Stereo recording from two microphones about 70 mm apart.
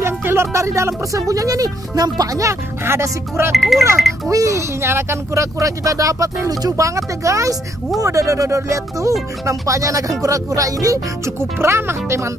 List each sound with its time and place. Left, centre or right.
0.0 s speech: right
2.3 s speech: right
3.5 s speech: centre
4.3 s speech: right
11.3 s speech: right